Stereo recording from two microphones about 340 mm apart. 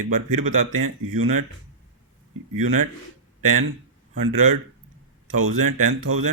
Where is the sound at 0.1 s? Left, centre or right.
Right.